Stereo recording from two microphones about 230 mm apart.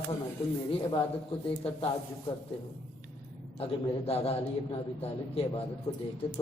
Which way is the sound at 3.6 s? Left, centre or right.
Left.